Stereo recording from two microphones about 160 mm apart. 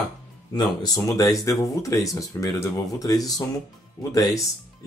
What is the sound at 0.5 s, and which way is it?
Speech, 25° left (ahead or behind).